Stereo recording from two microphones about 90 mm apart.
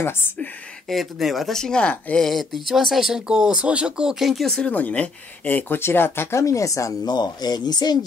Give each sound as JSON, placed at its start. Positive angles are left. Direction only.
{"t": 0.8, "sound": "speech", "side_deg": 0}
{"t": 7.2, "sound": "speech", "side_deg": 50}